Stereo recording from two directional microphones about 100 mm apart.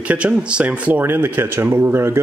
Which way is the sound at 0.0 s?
15° right (ahead or behind).